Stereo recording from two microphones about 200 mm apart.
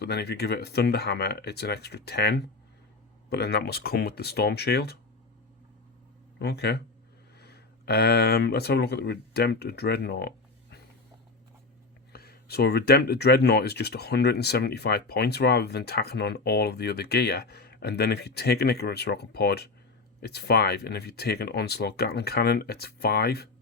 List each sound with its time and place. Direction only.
0.0 s speech: 55° left (ahead or behind)
6.4 s speech: 55° left (ahead or behind)
12.1 s speech: 50° left (ahead or behind)